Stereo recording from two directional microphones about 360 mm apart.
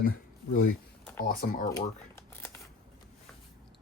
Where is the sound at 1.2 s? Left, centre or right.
Left.